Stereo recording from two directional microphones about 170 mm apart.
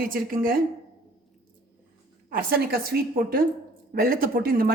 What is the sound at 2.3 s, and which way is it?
Speech, 60° right (ahead or behind).